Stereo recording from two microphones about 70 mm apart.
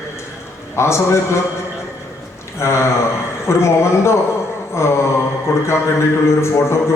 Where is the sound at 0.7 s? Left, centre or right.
Left.